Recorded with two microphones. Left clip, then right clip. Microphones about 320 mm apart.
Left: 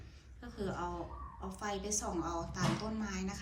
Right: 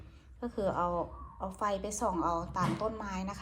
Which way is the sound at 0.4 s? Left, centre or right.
Centre.